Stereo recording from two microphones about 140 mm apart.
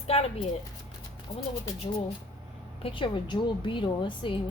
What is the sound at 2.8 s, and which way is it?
A woman's voice, 35° left (ahead or behind).